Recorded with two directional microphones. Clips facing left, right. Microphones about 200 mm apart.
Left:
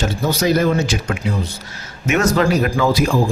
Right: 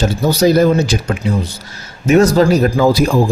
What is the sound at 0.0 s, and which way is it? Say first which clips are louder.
A man's voice: right 6 dB; 35° right (ahead or behind).